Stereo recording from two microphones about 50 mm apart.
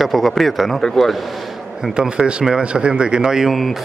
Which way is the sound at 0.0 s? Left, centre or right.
Centre.